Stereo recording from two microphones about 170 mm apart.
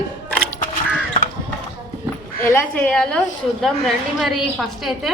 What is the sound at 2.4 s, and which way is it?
A woman's voice, 10° left (ahead or behind).